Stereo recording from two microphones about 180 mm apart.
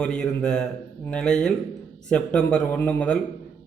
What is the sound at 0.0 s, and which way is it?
A man's voice, 5° left (ahead or behind).